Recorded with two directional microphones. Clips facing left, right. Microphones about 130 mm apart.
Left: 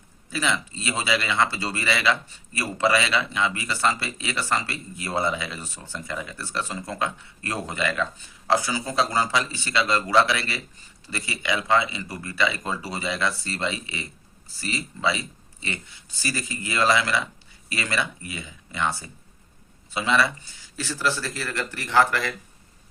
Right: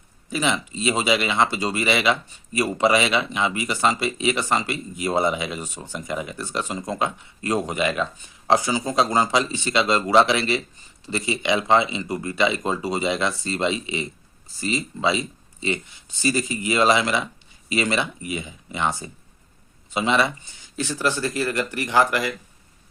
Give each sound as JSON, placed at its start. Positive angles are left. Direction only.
{"t": 0.3, "sound": "speech", "side_deg": -20}